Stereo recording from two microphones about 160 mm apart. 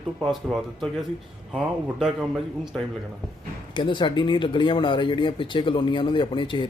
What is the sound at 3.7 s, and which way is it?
Speech, 30° left (ahead or behind).